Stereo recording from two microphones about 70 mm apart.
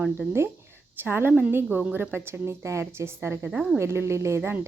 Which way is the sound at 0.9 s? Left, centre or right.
Right.